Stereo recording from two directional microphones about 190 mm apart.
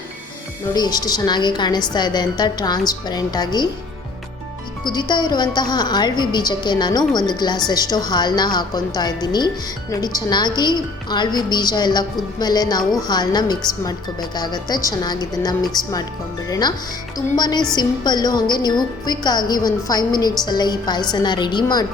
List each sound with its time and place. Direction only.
0.7 s a woman's voice: 20° left (ahead or behind)
4.9 s a woman's voice: 20° left (ahead or behind)